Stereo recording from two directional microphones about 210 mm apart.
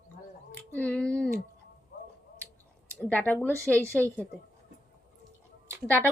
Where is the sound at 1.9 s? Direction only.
45° left (ahead or behind).